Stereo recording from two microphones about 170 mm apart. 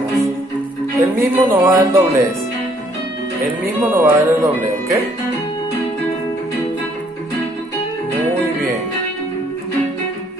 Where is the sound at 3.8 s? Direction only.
10° right (ahead or behind).